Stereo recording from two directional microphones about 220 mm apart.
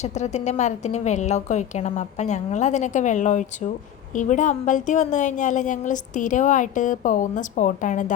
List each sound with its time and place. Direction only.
0.0 s a woman's voice: 30° left (ahead or behind)